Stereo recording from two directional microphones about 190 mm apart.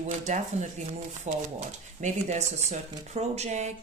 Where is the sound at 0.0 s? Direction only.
40° right (ahead or behind).